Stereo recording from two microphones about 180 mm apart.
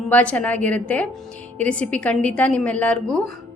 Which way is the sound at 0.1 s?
5° left (ahead or behind).